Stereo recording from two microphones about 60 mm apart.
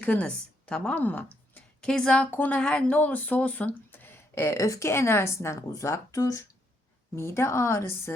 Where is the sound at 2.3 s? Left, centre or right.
Left.